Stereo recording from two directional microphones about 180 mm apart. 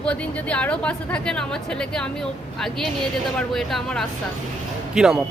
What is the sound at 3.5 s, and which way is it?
A woman's voice, centre (ahead or behind).